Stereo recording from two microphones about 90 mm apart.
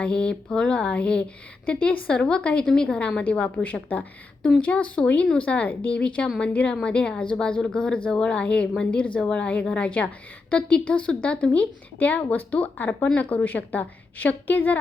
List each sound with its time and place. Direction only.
0.0 s a woman's voice: 10° left (ahead or behind)